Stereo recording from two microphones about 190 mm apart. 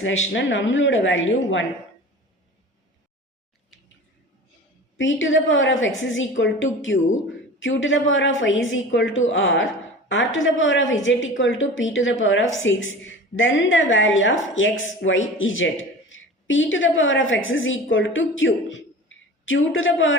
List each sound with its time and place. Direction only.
0.0 s a woman's voice: 85° left
4.9 s a woman's voice: 80° left